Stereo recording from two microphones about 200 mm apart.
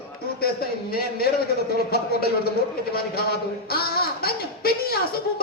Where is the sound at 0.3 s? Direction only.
50° left (ahead or behind).